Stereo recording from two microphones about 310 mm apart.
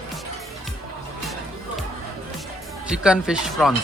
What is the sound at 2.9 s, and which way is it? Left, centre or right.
Speech, centre.